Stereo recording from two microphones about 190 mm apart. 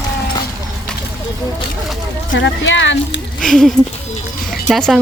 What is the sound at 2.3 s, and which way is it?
Speech, 75° left (ahead or behind).